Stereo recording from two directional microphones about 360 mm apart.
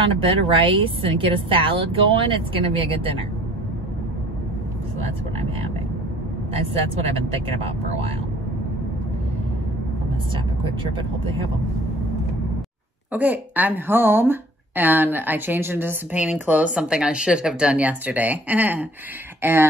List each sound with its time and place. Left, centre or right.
0.1 s speech: centre
6.5 s speech: centre
10.3 s speech: centre
13.1 s speech: centre